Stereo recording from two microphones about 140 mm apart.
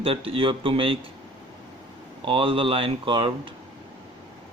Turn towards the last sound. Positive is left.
turn(degrees=-35)  # may be behind; listen again after turning